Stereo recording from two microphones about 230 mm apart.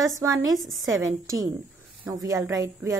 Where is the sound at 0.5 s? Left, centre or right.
Centre.